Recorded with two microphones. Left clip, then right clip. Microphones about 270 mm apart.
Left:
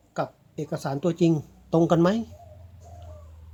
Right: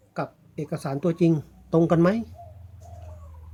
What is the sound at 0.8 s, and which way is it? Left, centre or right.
Speech, centre.